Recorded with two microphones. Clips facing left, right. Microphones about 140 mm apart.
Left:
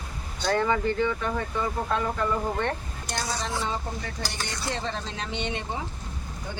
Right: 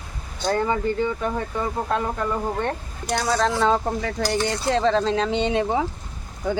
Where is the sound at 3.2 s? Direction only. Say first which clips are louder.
Right 11 dB; 90° right.